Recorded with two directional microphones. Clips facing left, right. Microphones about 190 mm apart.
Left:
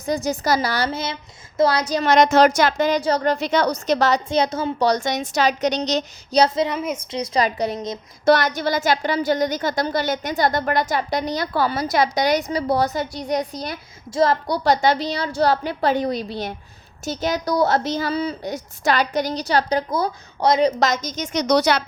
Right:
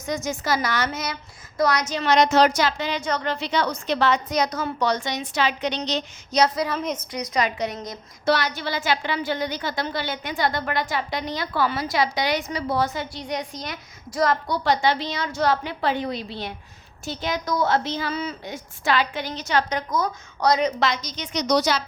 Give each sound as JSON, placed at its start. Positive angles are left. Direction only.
{"t": 0.0, "sound": "a woman's voice", "side_deg": 35}
{"t": 3.0, "sound": "a woman's voice", "side_deg": 35}
{"t": 4.3, "sound": "a woman's voice", "side_deg": 25}
{"t": 6.4, "sound": "a woman's voice", "side_deg": 25}
{"t": 6.7, "sound": "a woman's voice", "side_deg": 10}
{"t": 7.1, "sound": "a woman's voice", "side_deg": 30}
{"t": 8.2, "sound": "a woman's voice", "side_deg": 50}